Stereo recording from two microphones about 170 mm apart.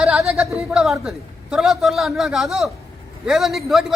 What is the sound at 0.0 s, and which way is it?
A man's voice, 5° right (ahead or behind).